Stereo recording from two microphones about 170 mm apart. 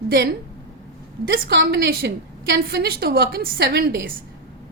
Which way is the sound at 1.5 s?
70° right (ahead or behind).